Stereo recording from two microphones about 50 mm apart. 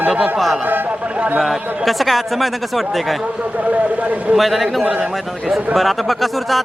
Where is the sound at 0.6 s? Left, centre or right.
Right.